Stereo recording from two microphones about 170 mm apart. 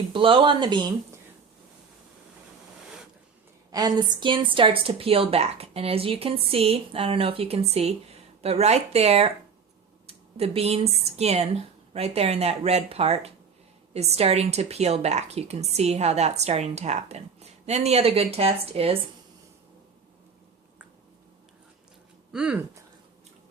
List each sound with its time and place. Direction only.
0.1 s speech: 30° right (ahead or behind)
3.7 s a woman's voice: 25° right (ahead or behind)
22.3 s speech: 5° right (ahead or behind)